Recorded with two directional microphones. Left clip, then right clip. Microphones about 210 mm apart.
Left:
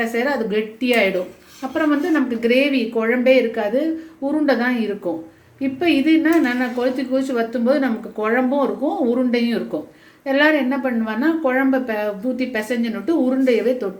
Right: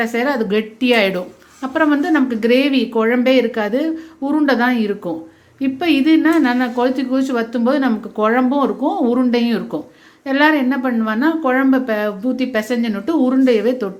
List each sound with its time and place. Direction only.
0.0 s a woman's voice: 50° right (ahead or behind)